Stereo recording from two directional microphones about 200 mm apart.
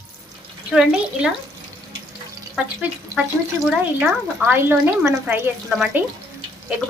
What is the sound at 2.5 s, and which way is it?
Speech, 5° right (ahead or behind).